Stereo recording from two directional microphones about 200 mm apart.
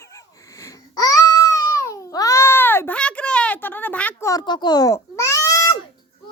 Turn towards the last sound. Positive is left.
turn(degrees=15)  # may be behind; listen again after turning